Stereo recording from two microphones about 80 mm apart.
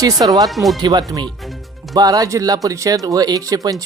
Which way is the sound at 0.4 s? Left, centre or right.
Centre.